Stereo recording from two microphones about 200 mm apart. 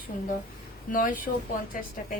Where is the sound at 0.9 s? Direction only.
45° left (ahead or behind).